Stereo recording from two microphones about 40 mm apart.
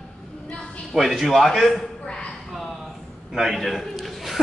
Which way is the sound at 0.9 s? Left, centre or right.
Centre.